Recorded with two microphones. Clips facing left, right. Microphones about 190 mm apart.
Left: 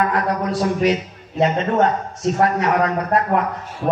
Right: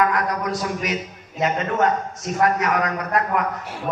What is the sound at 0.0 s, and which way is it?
Speech, 30° left (ahead or behind).